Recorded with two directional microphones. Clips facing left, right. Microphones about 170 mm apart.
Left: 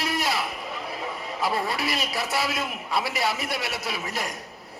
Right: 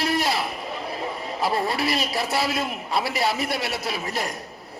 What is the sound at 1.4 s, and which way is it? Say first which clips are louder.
A man's voice: right 3 dB; 30° right (ahead or behind).